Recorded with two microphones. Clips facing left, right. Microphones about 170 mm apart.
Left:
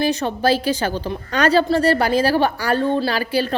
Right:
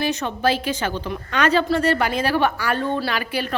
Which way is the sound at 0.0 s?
35° left (ahead or behind).